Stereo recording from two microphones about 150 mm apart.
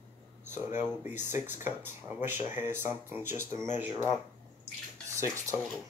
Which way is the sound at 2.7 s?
15° right (ahead or behind).